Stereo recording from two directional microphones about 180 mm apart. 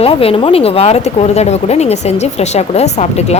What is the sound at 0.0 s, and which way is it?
Speech, 30° left (ahead or behind).